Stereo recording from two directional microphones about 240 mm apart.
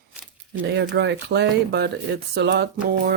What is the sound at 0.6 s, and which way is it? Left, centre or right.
Speech, right.